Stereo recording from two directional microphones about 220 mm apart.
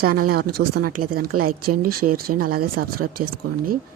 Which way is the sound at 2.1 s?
40° right (ahead or behind).